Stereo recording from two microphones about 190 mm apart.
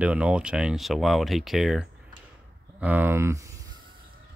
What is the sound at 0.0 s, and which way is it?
Speech, 5° right (ahead or behind).